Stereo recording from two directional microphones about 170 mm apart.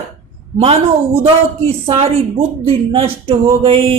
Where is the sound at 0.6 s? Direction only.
35° right (ahead or behind).